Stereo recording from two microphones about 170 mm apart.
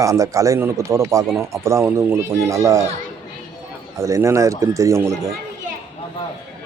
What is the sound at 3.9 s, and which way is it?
Speech, 15° right (ahead or behind).